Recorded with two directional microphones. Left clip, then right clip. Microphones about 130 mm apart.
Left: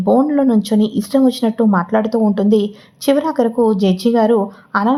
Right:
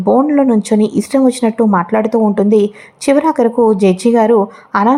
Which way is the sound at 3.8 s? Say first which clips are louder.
Right 5 dB; centre (ahead or behind).